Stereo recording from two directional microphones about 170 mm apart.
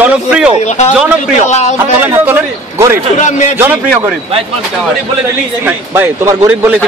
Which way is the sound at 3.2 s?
45° left (ahead or behind).